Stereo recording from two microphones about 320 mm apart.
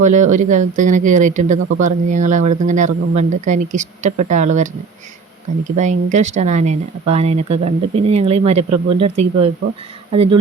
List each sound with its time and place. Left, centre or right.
0.0 s speech: right